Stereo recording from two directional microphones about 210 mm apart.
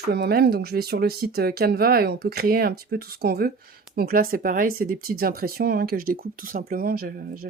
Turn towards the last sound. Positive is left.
turn(degrees=-45)  # may be behind; listen again after turning